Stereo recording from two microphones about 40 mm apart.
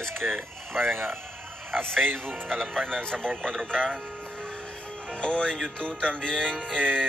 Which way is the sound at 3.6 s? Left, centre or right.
Right.